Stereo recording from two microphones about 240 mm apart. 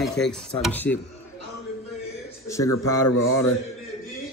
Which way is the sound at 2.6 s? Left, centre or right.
Left.